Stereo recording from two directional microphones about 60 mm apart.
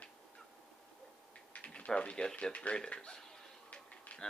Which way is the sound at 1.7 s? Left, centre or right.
Centre.